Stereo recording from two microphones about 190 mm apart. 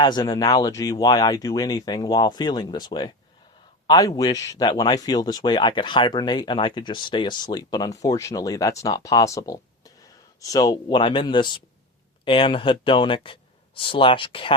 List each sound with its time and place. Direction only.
0.0 s speech: 20° left (ahead or behind)